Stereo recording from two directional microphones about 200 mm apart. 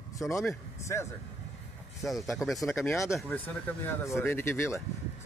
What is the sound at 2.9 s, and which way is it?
Speech, 15° left (ahead or behind).